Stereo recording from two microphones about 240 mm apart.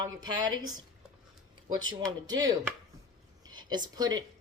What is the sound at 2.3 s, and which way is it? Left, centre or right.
Speech, centre.